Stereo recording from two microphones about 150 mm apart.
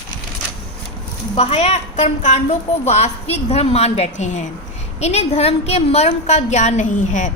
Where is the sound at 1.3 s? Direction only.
45° left (ahead or behind).